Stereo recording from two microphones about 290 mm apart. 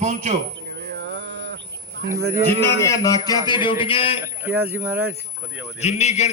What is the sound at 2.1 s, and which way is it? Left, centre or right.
Speech, centre.